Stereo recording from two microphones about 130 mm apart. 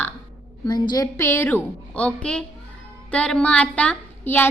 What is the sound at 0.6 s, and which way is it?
A woman's voice, 35° left (ahead or behind).